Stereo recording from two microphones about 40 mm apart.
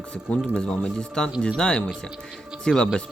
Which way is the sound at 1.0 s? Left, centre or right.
Centre.